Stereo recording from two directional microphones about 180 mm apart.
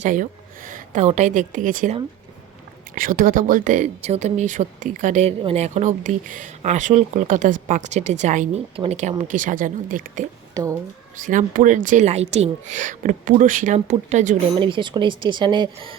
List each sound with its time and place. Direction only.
0.0 s a woman's voice: 45° right (ahead or behind)
5.4 s speech: 35° right (ahead or behind)
10.5 s speech: 20° right (ahead or behind)
11.2 s speech: 45° right (ahead or behind)
14.6 s speech: 25° right (ahead or behind)